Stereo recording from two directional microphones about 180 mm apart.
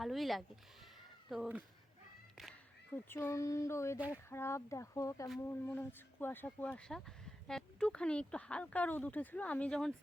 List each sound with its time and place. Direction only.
0.0 s speech: centre (ahead or behind)
2.9 s speech: 15° left (ahead or behind)